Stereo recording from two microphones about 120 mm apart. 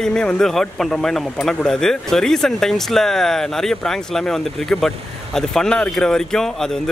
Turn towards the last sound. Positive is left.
turn(degrees=5)  # may be behind; listen again after turning